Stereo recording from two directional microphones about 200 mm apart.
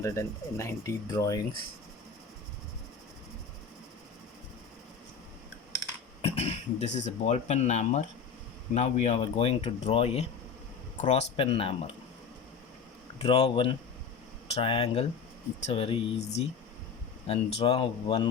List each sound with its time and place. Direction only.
0.0 s speech: 15° left (ahead or behind)
6.2 s speech: 30° left (ahead or behind)
13.2 s speech: 30° left (ahead or behind)